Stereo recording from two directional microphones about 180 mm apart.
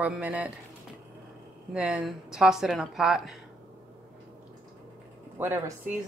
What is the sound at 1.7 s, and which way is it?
Speech, 5° right (ahead or behind).